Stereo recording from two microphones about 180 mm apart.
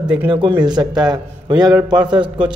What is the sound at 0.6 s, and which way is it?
Speech, 25° right (ahead or behind).